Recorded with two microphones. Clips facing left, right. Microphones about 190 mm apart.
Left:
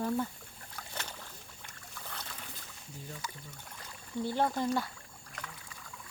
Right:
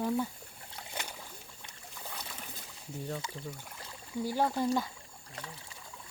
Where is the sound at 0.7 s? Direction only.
15° right (ahead or behind).